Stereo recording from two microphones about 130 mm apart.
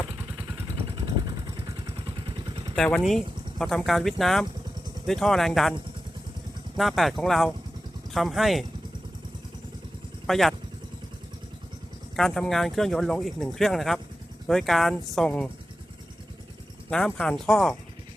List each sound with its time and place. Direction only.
0.3 s vehicle: 35° right (ahead or behind)
2.7 s speech: 5° left (ahead or behind)
6.7 s speech: centre (ahead or behind)
10.2 s speech: centre (ahead or behind)
12.1 s speech: 5° left (ahead or behind)
16.9 s speech: 5° left (ahead or behind)